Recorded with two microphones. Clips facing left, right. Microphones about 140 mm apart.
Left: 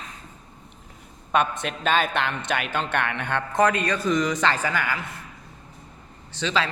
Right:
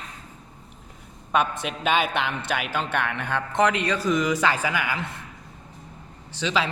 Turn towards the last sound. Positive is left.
turn(degrees=-10)  # may be behind; listen again after turning